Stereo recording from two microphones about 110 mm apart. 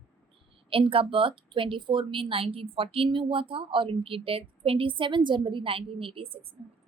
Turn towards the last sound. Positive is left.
turn(degrees=-55)  # may be behind; listen again after turning